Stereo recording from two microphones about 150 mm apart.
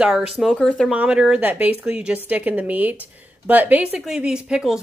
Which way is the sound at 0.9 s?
5° right (ahead or behind).